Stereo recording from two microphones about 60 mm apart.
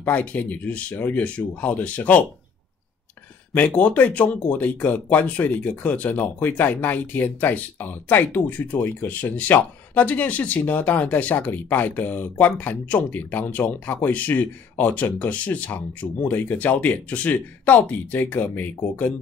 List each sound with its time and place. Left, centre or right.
0.0 s speech: left
3.5 s speech: left